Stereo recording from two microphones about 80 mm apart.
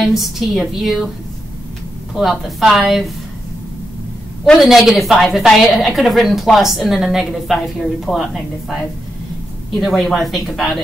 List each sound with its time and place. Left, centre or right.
0.0 s a woman's voice: centre
2.1 s a woman's voice: centre
4.6 s a woman's voice: centre
9.8 s a woman's voice: centre